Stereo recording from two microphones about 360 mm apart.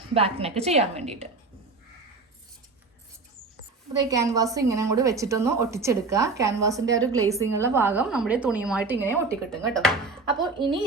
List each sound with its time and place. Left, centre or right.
0.1 s a woman's voice: centre
3.9 s a woman's voice: centre